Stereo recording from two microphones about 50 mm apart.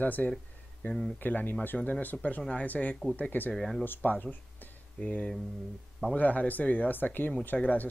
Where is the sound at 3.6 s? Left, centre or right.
Centre.